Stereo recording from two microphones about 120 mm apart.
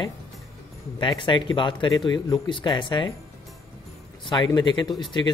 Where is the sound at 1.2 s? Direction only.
40° left (ahead or behind).